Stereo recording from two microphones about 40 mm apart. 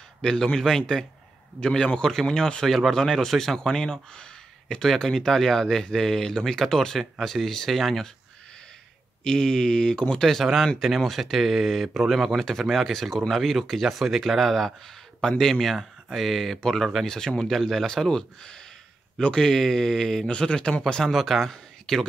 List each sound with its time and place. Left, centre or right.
0.2 s speech: centre
9.2 s speech: centre
10.4 s a man's voice: centre